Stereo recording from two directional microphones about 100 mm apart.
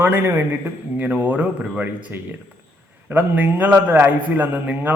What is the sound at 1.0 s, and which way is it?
A man's voice, 15° right (ahead or behind).